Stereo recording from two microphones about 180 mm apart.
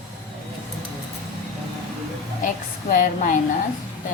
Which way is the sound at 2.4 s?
50° left (ahead or behind).